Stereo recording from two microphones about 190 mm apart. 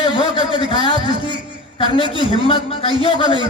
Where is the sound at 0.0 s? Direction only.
25° left (ahead or behind).